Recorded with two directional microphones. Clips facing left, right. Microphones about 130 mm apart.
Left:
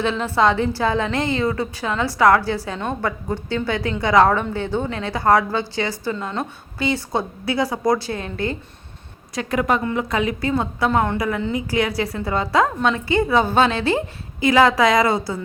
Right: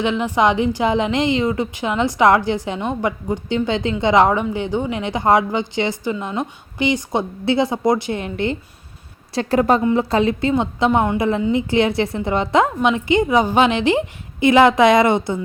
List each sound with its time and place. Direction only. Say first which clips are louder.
0.0 s a woman's voice: right 1 dB; 15° right (ahead or behind)
9.3 s a woman's voice: right 4 dB; 30° right (ahead or behind)